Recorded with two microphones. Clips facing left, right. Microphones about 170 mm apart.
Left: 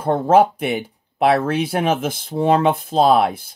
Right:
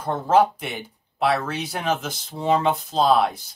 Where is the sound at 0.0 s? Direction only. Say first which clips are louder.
Left 4 dB; 55° left (ahead or behind).